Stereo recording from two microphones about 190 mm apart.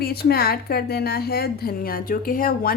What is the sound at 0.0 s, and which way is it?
A woman's voice, 55° left (ahead or behind).